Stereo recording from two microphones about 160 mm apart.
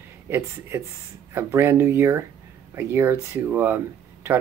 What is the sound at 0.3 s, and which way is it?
Speech, 15° right (ahead or behind).